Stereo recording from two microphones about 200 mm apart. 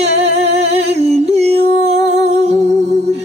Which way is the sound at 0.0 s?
30° right (ahead or behind).